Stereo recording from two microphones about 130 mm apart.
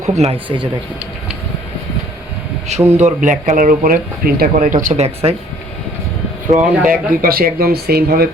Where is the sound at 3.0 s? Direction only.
70° right (ahead or behind); by 5.4 s 55° right (ahead or behind).